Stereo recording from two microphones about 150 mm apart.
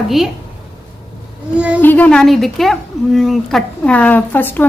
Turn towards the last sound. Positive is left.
turn(degrees=10)  # may be behind; listen again after turning